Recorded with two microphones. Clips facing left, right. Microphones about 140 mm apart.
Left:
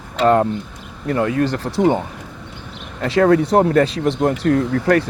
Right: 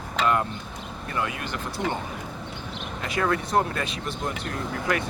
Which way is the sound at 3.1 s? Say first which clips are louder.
Left 12 dB; 35° left (ahead or behind).